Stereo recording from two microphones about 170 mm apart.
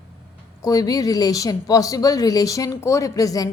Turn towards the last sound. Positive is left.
turn(degrees=20)  # may be behind; listen again after turning